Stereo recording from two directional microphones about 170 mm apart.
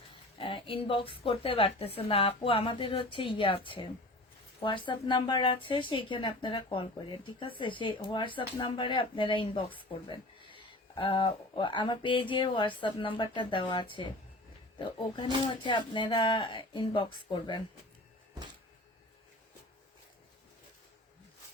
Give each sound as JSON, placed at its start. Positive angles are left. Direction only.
{"t": 0.3, "sound": "a woman's voice", "side_deg": 30}